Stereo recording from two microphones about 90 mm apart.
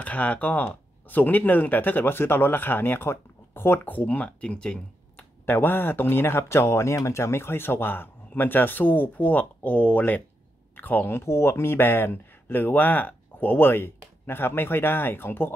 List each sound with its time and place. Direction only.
0.0 s speech: 15° left (ahead or behind)
5.4 s speech: 25° left (ahead or behind)